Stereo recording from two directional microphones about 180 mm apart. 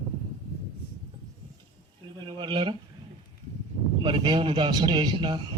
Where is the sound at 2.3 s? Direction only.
25° right (ahead or behind).